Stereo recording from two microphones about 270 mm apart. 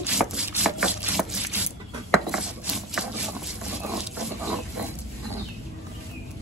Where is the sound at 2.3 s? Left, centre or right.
Centre.